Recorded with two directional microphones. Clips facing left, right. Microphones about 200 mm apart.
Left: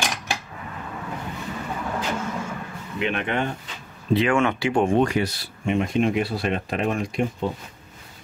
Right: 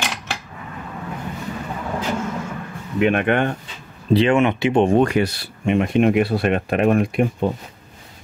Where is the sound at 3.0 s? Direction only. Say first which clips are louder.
Right 7 dB; 55° right (ahead or behind).